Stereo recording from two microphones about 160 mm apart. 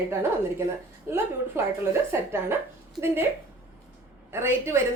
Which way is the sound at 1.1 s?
15° right (ahead or behind).